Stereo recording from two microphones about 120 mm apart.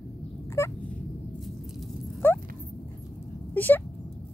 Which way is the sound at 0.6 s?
25° left (ahead or behind).